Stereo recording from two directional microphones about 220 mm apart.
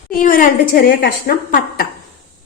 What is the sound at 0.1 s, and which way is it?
Speech, 40° left (ahead or behind).